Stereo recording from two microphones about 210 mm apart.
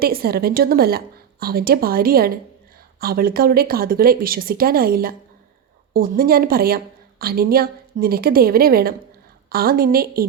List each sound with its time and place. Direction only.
0.0 s a woman's voice: 45° right (ahead or behind)